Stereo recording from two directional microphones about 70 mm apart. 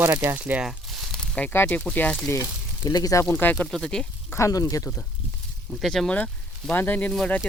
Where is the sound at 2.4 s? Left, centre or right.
Left.